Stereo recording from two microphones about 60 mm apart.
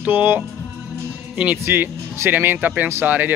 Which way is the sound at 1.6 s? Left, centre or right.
Right.